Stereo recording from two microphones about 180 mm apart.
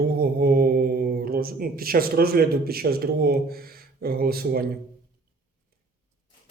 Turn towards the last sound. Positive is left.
turn(degrees=-55)  # may be behind; listen again after turning